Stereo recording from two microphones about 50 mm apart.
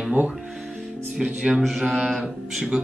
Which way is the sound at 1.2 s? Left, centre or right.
Centre.